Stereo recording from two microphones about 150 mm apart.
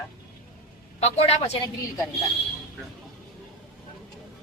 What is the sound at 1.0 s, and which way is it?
Speech, 45° left (ahead or behind).